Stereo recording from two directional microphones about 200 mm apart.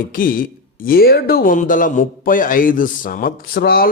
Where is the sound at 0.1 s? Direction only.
45° left (ahead or behind).